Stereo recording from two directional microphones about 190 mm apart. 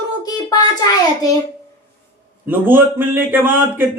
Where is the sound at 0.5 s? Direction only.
20° left (ahead or behind).